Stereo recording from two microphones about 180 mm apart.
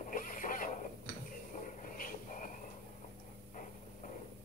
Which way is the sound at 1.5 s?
45° left (ahead or behind).